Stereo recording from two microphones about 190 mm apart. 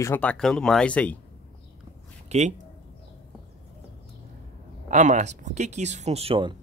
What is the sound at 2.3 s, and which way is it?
Speech, 35° right (ahead or behind).